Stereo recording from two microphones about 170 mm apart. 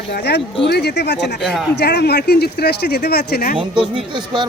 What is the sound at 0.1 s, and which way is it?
Speech, 80° left.